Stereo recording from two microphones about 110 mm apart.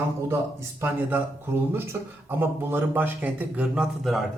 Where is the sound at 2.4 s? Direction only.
20° right (ahead or behind).